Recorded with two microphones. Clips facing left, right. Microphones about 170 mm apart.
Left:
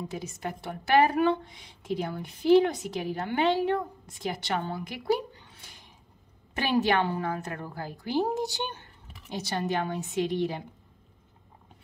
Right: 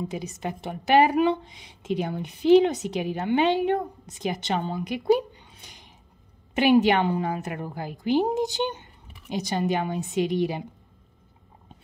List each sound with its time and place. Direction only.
0.0 s a woman's voice: 15° right (ahead or behind)